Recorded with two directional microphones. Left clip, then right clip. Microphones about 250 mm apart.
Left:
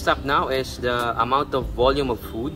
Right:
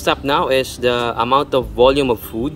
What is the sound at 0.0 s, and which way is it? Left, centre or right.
Speech, right.